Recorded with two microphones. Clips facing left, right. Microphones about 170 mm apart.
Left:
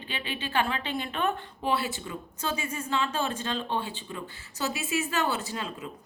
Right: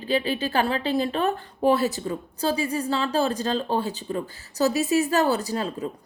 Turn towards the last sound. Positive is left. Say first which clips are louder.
# right 8 dB
turn(degrees=-40)  # may be behind; listen again after turning